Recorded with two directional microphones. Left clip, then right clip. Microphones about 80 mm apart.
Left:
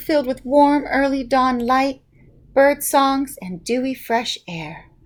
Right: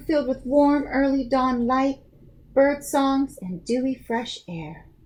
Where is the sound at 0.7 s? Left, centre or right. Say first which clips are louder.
Left 4 dB; left.